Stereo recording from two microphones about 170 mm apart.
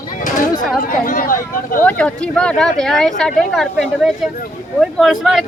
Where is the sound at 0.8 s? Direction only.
55° left (ahead or behind).